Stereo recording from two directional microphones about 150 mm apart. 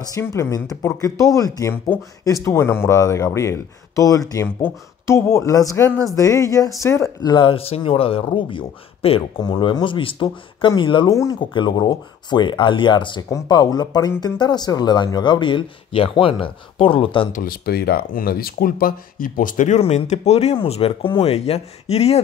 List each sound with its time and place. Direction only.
0.1 s speech: 20° left (ahead or behind); by 17.3 s 35° left (ahead or behind)
17.3 s speech: 75° left (ahead or behind); by 19.8 s 60° left (ahead or behind)
19.8 s speech: 45° left (ahead or behind)